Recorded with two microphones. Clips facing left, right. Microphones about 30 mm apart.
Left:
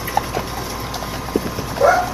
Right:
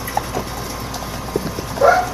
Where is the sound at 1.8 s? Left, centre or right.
Centre.